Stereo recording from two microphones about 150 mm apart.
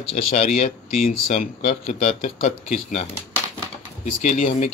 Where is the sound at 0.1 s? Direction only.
50° left (ahead or behind).